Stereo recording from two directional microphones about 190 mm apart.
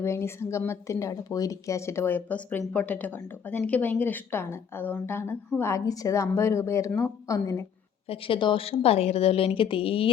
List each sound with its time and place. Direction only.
0.0 s a woman's voice: 15° left (ahead or behind); by 10.1 s 30° left (ahead or behind)